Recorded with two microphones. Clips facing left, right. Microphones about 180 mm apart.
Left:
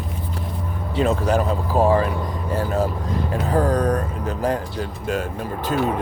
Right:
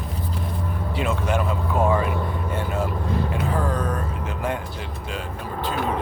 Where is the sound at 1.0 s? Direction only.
35° left (ahead or behind).